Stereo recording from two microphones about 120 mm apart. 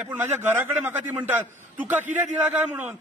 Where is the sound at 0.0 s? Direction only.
15° right (ahead or behind).